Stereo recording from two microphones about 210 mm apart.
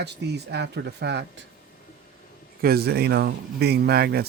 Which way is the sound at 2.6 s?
50° right (ahead or behind).